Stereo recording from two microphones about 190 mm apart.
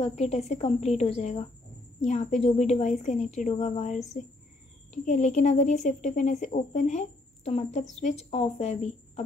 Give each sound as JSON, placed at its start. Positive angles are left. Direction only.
{"t": 0.0, "sound": "speech", "side_deg": 35}